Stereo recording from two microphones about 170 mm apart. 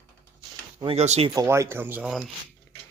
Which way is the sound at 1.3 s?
20° right (ahead or behind).